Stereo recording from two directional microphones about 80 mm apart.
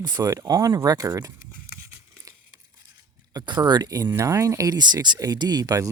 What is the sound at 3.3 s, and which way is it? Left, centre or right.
Speech, right.